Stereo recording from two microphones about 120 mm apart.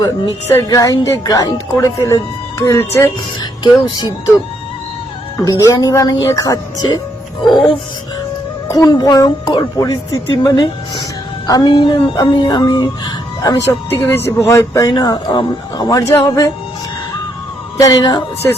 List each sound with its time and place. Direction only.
0.4 s speech: 25° left (ahead or behind)
3.6 s speech: 40° left (ahead or behind)
5.4 s speech: 25° left (ahead or behind)
8.6 s speech: 30° left (ahead or behind)
13.9 s speech: 20° left (ahead or behind)
17.7 s speech: 30° left (ahead or behind)